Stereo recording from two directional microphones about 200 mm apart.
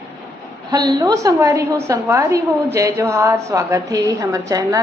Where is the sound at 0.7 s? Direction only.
20° right (ahead or behind).